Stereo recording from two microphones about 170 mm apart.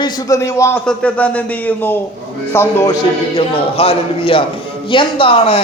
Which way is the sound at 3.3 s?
35° left (ahead or behind).